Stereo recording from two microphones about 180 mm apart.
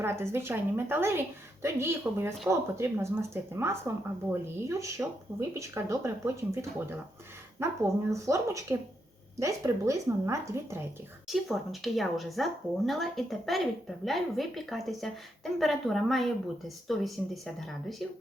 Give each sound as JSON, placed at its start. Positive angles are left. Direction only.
{"t": 0.0, "sound": "speech", "side_deg": -15}
{"t": 11.3, "sound": "a woman's voice", "side_deg": 0}